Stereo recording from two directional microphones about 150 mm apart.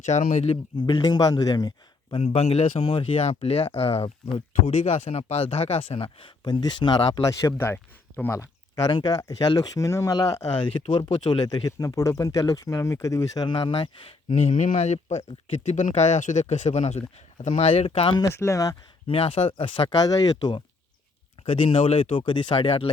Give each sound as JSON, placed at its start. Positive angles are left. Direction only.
{"t": 0.0, "sound": "speech", "side_deg": 55}
{"t": 0.5, "sound": "speech", "side_deg": 35}
{"t": 2.2, "sound": "speech", "side_deg": 45}
{"t": 14.3, "sound": "speech", "side_deg": 55}
{"t": 18.3, "sound": "speech", "side_deg": 20}
{"t": 19.0, "sound": "speech", "side_deg": 40}